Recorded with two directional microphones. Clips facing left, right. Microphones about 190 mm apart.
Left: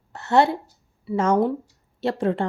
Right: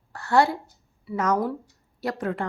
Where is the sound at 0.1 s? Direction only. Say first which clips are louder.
Left 2 dB; 20° left (ahead or behind).